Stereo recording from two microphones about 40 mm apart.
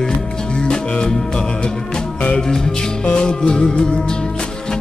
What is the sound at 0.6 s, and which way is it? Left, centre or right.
Music, left.